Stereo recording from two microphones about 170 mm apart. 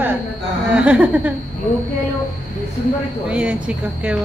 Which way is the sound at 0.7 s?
5° right (ahead or behind).